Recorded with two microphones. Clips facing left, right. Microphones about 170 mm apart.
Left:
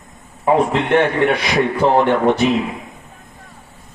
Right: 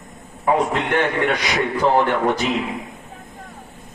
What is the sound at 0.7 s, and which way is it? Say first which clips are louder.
A man's voice: left 5 dB; 25° left (ahead or behind).